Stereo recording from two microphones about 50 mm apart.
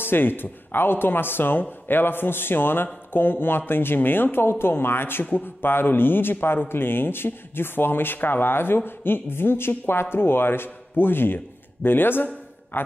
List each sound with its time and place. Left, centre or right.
0.0 s speech: left